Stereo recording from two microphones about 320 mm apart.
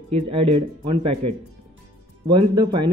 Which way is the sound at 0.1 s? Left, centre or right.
Centre.